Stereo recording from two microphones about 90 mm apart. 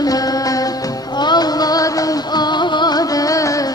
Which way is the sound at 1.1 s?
55° left (ahead or behind).